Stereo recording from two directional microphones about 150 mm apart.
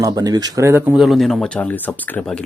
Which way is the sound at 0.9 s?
Centre (ahead or behind).